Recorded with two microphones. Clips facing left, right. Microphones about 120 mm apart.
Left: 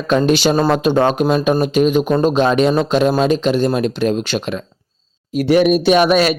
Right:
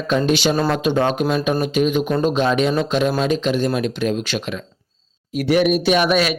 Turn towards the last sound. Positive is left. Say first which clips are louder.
# left 4 dB
turn(degrees=35)  # may be behind; listen again after turning